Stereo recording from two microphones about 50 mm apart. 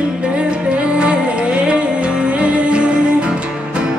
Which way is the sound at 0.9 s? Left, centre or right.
Right.